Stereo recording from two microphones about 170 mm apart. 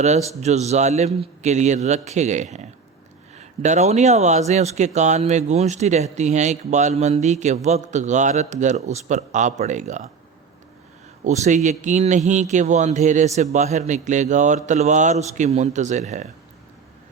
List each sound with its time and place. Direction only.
0.0 s speech: 40° right (ahead or behind)
11.2 s speech: 45° right (ahead or behind)